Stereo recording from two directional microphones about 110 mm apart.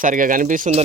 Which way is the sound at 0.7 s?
90° right.